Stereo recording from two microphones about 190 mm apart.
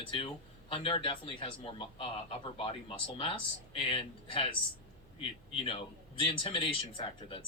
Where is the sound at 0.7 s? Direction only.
30° left (ahead or behind).